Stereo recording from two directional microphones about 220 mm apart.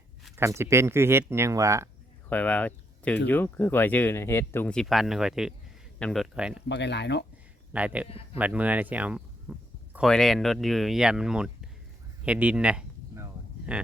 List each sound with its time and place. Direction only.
0.3 s speech: 10° right (ahead or behind)
2.3 s speech: 5° left (ahead or behind)
6.7 s speech: 50° left (ahead or behind)
7.7 s speech: 5° right (ahead or behind)
12.2 s a sound: 5° right (ahead or behind)